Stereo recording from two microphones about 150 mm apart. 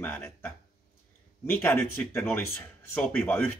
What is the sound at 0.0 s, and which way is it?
Speech, 10° left (ahead or behind).